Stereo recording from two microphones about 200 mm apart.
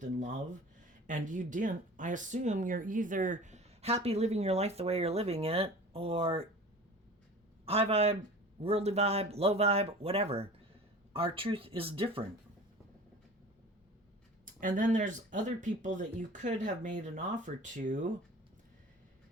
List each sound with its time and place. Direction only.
0.0 s speech: 40° right (ahead or behind)
7.6 s speech: 30° right (ahead or behind)
14.4 s speech: 40° right (ahead or behind)